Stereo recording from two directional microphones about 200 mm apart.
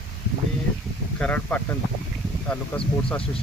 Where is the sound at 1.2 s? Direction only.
5° left (ahead or behind).